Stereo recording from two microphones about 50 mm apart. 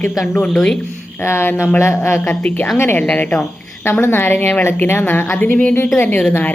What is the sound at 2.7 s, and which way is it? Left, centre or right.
Speech, left.